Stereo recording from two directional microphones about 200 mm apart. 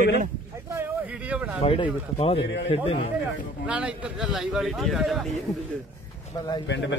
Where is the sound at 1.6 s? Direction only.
30° left (ahead or behind).